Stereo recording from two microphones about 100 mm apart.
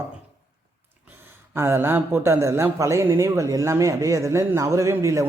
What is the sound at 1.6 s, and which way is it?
A man's voice, 25° right (ahead or behind).